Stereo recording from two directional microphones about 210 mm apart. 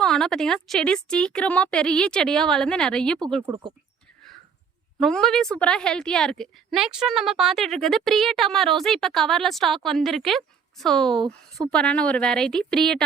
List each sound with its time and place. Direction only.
0.0 s a woman's voice: 5° left (ahead or behind)
3.4 s speech: 20° right (ahead or behind)
4.9 s a woman's voice: centre (ahead or behind)